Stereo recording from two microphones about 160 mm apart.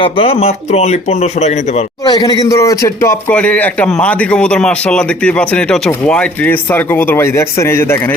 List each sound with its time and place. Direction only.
0.0 s speech: 35° left (ahead or behind)
2.0 s speech: 25° left (ahead or behind)